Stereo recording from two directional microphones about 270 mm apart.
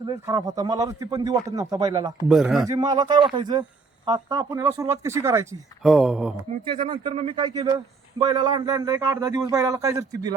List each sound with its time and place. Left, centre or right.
0.0 s speech: centre
2.3 s speech: centre
2.6 s speech: centre
6.5 s speech: centre